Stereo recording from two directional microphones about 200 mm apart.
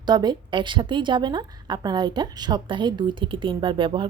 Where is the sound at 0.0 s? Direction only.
20° right (ahead or behind).